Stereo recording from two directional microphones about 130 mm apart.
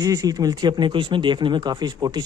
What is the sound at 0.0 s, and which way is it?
A man's voice, 25° right (ahead or behind).